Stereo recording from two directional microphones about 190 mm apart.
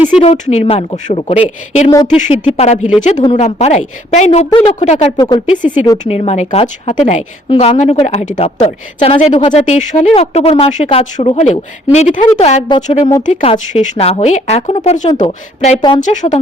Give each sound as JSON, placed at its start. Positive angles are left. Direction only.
{"t": 0.0, "sound": "a woman's voice", "side_deg": 35}
{"t": 9.6, "sound": "a woman's voice", "side_deg": 40}